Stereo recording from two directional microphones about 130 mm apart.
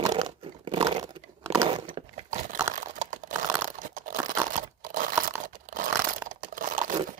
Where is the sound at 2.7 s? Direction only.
80° right.